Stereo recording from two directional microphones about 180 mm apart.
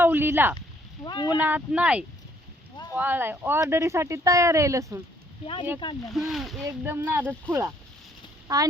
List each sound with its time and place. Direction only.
0.0 s a sound: 10° right (ahead or behind)
1.0 s speech: 25° left (ahead or behind)
1.4 s speech: 10° right (ahead or behind)
6.1 s speech: centre (ahead or behind)
6.7 s a child's voice: 15° right (ahead or behind)